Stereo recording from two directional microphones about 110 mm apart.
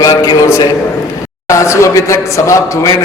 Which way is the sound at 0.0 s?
30° left (ahead or behind).